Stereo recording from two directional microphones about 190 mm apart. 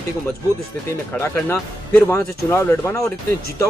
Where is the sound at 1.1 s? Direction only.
10° left (ahead or behind).